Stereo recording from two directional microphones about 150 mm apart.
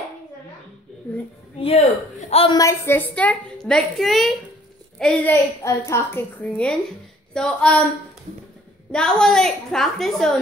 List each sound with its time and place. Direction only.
1.6 s a man's voice: 50° left (ahead or behind)
2.5 s a woman's voice: 20° left (ahead or behind)
8.9 s a woman's voice: 5° left (ahead or behind)